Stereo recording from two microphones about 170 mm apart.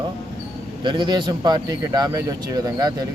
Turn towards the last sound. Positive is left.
turn(degrees=-20)  # may be behind; listen again after turning